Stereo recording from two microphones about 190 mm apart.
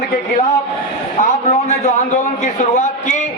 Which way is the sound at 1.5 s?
40° left (ahead or behind).